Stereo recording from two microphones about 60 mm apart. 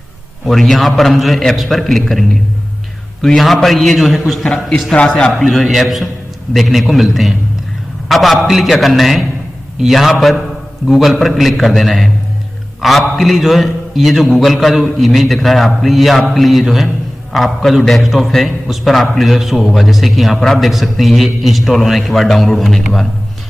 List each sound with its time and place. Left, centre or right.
0.5 s a man's voice: centre
4.5 s a man's voice: centre
5.4 s a man's voice: centre